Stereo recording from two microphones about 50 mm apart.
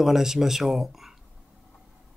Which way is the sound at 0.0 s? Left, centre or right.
Centre.